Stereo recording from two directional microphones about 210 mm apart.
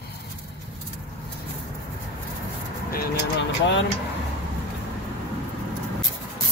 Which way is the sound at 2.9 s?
55° left (ahead or behind).